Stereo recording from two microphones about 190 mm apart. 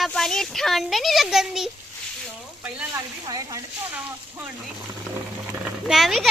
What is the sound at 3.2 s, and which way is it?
Speech, 20° right (ahead or behind).